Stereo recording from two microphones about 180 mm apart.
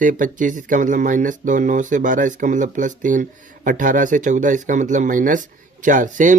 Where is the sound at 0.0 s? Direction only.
45° right (ahead or behind).